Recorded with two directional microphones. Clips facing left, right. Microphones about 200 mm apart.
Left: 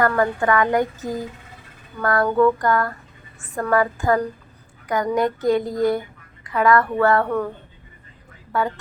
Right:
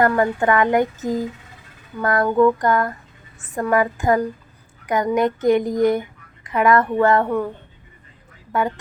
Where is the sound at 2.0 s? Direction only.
20° right (ahead or behind).